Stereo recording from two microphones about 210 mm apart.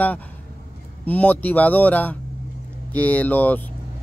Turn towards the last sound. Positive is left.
turn(degrees=10)  # may be behind; listen again after turning